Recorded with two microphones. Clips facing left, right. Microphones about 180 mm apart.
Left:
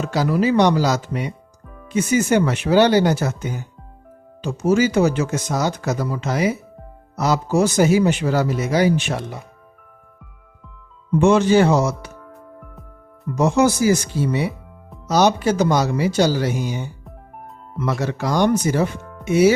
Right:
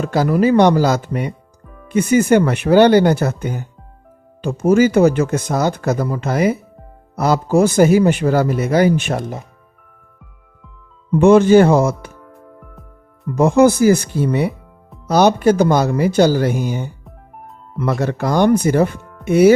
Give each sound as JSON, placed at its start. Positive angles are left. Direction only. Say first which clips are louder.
{"t": 0.0, "sound": "speech", "louder": "right 4 dB", "side_deg": -55}
{"t": 11.2, "sound": "speech", "louder": "right 5 dB", "side_deg": -55}
{"t": 13.3, "sound": "speech", "louder": "right 5 dB", "side_deg": -55}
{"t": 18.0, "sound": "speech", "louder": "right 4 dB", "side_deg": -55}